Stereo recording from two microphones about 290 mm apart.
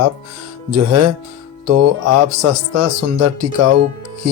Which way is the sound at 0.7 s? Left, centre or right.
Right.